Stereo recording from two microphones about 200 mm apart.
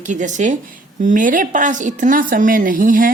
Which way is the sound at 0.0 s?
40° right (ahead or behind).